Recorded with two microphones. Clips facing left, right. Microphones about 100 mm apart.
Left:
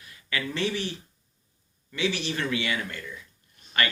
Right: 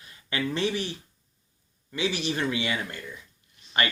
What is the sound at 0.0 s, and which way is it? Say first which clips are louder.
Speech: right 2 dB; 25° right (ahead or behind).